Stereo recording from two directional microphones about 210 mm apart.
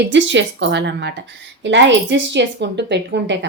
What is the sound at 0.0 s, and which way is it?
A woman's voice, 60° right (ahead or behind).